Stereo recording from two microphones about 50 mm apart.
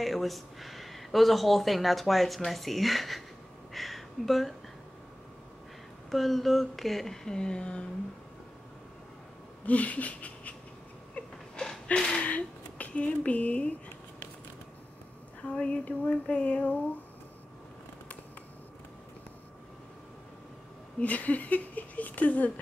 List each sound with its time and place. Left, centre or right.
0.0 s speech: centre
3.7 s a sound: centre
6.0 s speech: centre
9.7 s a sound: left
11.9 s speech: centre
12.2 s speech: left
15.4 s female singing: left
21.0 s speech: left